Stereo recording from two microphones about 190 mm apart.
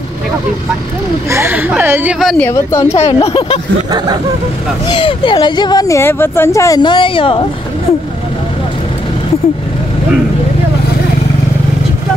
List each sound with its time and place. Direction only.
1.3 s speech: 10° right (ahead or behind)
2.4 s speech: 15° left (ahead or behind)
2.9 s speech: 30° left (ahead or behind)
4.8 s speech: 25° left (ahead or behind)